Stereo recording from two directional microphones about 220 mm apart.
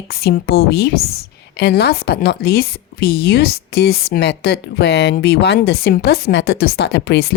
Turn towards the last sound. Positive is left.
turn(degrees=50)  # may be behind; listen again after turning